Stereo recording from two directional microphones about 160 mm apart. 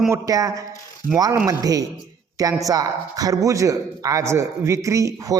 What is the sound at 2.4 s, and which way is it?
A man's voice, 20° right (ahead or behind).